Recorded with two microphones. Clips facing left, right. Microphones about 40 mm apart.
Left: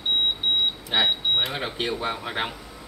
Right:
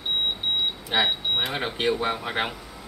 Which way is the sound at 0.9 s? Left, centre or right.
Centre.